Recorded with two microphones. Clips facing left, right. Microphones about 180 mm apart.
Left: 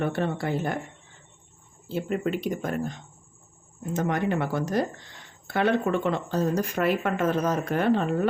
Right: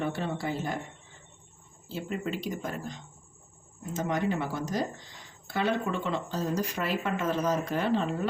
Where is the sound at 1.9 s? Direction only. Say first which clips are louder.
Left 6 dB; 60° left (ahead or behind).